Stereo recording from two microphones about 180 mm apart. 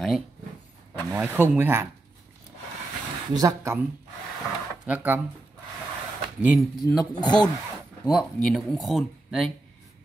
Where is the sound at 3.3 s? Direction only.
20° right (ahead or behind).